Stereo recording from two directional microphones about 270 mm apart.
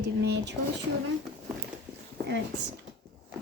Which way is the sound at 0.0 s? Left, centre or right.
Right.